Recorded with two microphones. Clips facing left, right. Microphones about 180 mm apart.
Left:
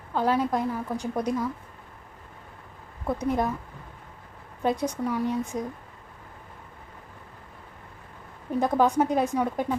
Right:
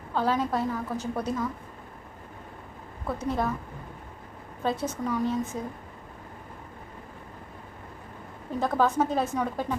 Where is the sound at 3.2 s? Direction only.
15° left (ahead or behind).